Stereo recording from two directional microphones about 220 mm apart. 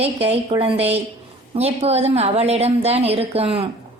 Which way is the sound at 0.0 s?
25° right (ahead or behind).